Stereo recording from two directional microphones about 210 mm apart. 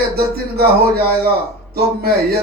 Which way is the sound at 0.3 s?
45° right (ahead or behind).